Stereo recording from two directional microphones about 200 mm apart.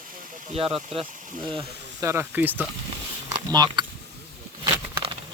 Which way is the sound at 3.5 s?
20° right (ahead or behind).